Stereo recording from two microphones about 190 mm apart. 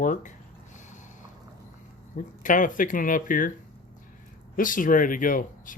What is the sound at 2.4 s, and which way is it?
Speech, 45° left (ahead or behind).